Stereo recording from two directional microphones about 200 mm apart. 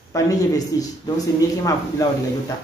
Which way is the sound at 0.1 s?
15° left (ahead or behind).